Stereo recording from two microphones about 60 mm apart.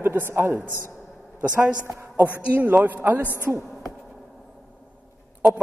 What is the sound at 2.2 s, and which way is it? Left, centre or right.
A man's voice, right.